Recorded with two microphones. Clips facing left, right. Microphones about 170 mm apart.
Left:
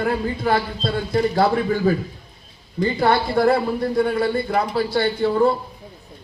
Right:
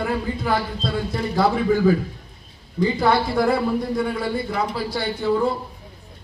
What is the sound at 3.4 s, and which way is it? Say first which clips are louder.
A man's voice: left 2 dB; 60° left (ahead or behind).